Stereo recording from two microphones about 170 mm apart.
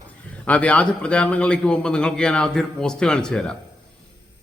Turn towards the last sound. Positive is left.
turn(degrees=5)  # may be behind; listen again after turning